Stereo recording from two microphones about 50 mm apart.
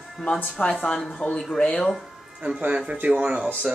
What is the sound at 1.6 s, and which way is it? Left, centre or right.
Speech, left.